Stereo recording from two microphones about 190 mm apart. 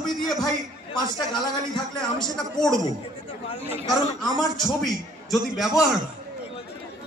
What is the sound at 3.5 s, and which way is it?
Speech, 30° left (ahead or behind).